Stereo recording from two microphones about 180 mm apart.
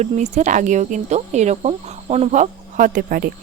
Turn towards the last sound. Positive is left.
turn(degrees=-50)  # may be behind; listen again after turning